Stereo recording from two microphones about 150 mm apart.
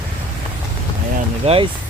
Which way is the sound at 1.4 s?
40° right (ahead or behind).